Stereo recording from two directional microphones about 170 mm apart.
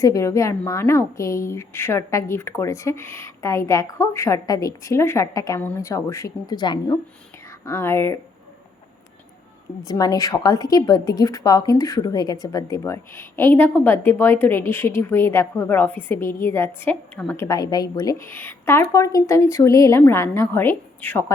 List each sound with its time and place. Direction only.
0.0 s a woman's voice: 20° left (ahead or behind)
9.8 s a woman's voice: 20° left (ahead or behind)